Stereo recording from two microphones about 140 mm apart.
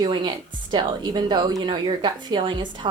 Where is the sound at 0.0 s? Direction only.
35° right (ahead or behind).